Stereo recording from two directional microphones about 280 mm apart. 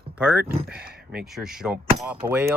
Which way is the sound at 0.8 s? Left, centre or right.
Right.